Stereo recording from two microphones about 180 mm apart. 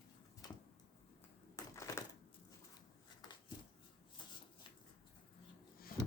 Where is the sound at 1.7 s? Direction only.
15° left (ahead or behind).